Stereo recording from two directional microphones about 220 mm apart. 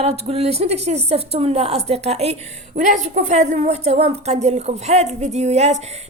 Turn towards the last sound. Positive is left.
turn(degrees=-30)  # may be behind; listen again after turning